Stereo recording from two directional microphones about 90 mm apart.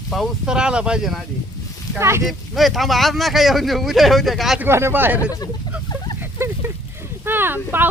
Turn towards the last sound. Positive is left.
turn(degrees=-25)  # may be behind; listen again after turning